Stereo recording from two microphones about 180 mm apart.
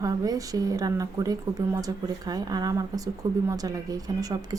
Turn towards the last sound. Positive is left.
turn(degrees=-20)  # may be behind; listen again after turning